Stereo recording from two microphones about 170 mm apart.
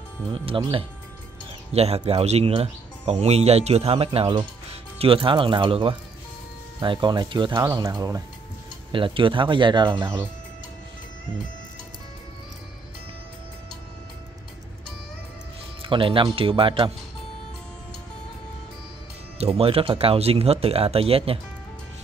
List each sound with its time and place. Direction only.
0.3 s speech: 30° right (ahead or behind)
10.0 s speech: 10° right (ahead or behind)
15.8 s speech: 30° right (ahead or behind)
19.3 s speech: 35° right (ahead or behind)